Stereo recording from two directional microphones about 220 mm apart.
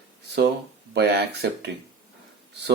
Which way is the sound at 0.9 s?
50° right (ahead or behind).